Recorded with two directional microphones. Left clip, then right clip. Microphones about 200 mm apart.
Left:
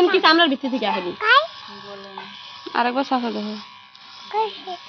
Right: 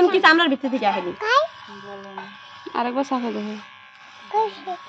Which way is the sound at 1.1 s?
20° right (ahead or behind).